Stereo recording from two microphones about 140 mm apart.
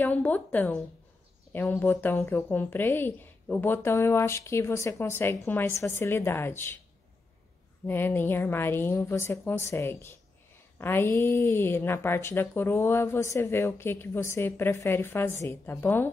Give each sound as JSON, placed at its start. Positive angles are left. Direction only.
{"t": 0.0, "sound": "speech", "side_deg": 10}
{"t": 7.8, "sound": "speech", "side_deg": 15}